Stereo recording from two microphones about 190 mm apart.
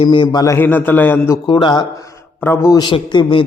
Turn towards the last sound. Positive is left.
turn(degrees=25)  # may be behind; listen again after turning